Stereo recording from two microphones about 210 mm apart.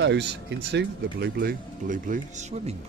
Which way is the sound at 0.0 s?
55° right (ahead or behind).